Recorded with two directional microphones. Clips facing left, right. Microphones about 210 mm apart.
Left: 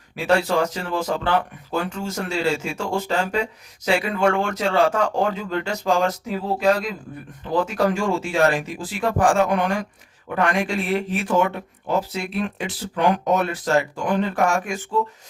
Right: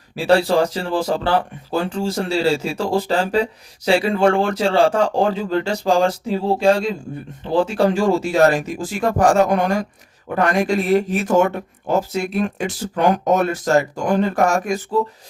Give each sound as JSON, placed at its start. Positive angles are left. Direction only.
{"t": 0.2, "sound": "speech", "side_deg": -35}